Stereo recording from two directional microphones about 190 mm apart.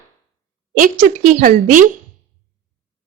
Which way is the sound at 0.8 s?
45° right (ahead or behind).